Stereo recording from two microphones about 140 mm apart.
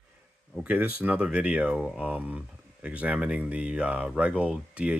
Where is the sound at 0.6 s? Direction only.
10° right (ahead or behind).